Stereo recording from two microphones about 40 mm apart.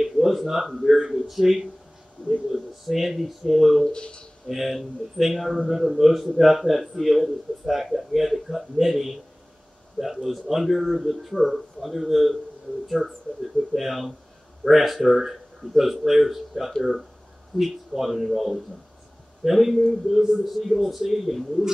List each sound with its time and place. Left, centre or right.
0.0 s a man's voice: centre
3.9 s speech: left
4.5 s a man's voice: centre